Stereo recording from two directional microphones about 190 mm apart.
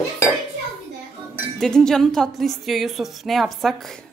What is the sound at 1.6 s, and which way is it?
A woman's voice, 5° left (ahead or behind).